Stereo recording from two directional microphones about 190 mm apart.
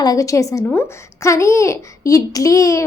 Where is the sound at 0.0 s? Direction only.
20° left (ahead or behind).